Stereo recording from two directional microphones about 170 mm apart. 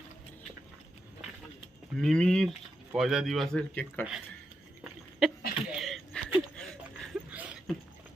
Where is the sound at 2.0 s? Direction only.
5° left (ahead or behind).